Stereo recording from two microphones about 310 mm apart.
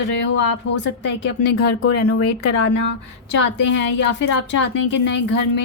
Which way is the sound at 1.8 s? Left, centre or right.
Left.